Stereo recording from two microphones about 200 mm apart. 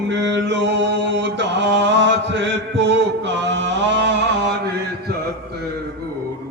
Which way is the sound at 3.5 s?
60° right (ahead or behind).